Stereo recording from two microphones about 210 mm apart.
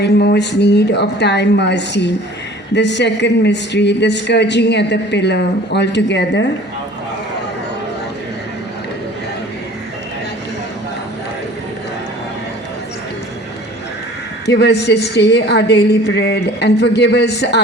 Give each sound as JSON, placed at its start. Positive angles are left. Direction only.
{"t": 0.0, "sound": "a woman's voice", "side_deg": 50}
{"t": 14.4, "sound": "a woman's voice", "side_deg": 55}